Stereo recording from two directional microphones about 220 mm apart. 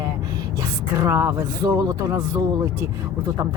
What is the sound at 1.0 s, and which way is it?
Speech, 10° right (ahead or behind).